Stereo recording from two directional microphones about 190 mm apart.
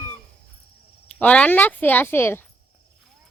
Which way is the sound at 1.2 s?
5° left (ahead or behind).